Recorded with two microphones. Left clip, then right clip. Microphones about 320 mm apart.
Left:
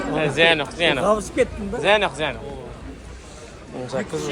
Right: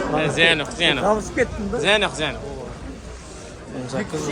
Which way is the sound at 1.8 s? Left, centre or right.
Centre.